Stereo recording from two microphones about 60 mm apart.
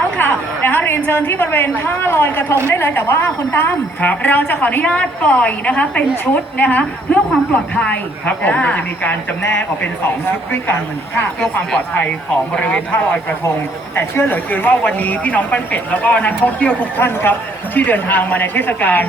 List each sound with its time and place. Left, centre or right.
0.2 s a sound: left
2.0 s a woman's voice: left
10.5 s speech: left
12.5 s speech: centre
13.9 s a woman's voice: left
17.0 s speech: left